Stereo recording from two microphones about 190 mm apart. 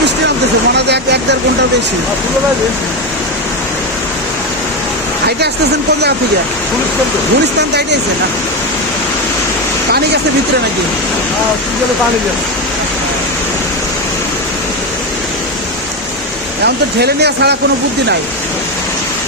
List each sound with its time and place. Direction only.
0.8 s vehicle: 65° right (ahead or behind)
7.6 s speech: 65° right (ahead or behind)
16.6 s speech: 60° right (ahead or behind)